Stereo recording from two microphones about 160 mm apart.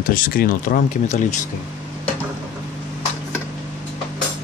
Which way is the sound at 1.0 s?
45° left (ahead or behind).